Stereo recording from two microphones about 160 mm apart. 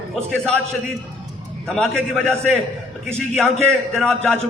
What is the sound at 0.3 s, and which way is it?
Speech, 5° left (ahead or behind).